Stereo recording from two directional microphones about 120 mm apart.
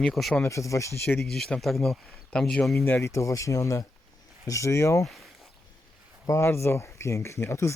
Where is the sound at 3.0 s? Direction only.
25° left (ahead or behind).